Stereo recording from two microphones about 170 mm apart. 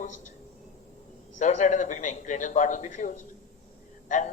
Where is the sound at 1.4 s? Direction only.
45° left (ahead or behind).